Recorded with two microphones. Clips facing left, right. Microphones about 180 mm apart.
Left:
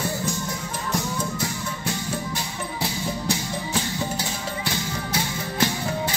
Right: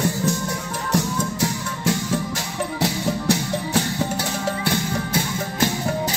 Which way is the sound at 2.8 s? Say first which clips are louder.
Right 5 dB; 65° right (ahead or behind).